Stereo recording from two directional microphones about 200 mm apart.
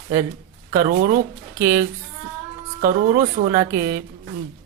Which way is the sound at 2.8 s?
45° right (ahead or behind).